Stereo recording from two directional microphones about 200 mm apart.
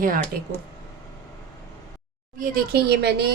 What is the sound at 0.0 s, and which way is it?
Speech, 45° right (ahead or behind).